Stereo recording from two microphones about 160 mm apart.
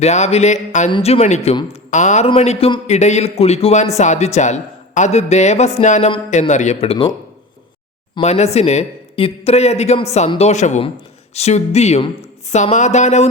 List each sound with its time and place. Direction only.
0.0 s speech: 45° left (ahead or behind)
0.9 s speech: 35° left (ahead or behind)
2.8 s speech: 45° left (ahead or behind)
8.2 s speech: 45° left (ahead or behind)